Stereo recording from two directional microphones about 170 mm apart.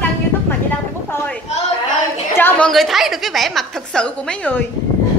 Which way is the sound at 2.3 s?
10° left (ahead or behind).